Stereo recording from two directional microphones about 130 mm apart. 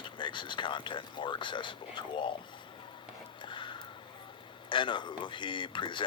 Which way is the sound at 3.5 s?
40° left (ahead or behind).